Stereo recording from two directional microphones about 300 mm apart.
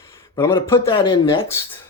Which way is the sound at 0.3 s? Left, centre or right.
Centre.